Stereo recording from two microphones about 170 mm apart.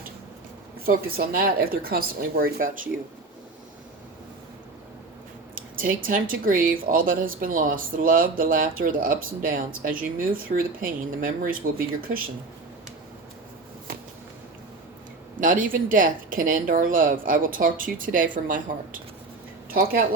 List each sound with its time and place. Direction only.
0.9 s speech: 60° right (ahead or behind)
5.5 s speech: 55° right (ahead or behind)
15.4 s speech: 50° right (ahead or behind)